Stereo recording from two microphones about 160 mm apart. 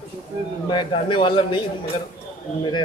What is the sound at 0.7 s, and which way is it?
Speech, 30° left (ahead or behind).